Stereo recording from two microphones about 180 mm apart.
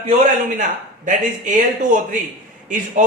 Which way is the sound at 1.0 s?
45° right (ahead or behind).